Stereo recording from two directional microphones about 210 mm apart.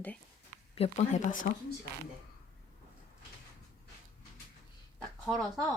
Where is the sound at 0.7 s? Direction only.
30° left (ahead or behind).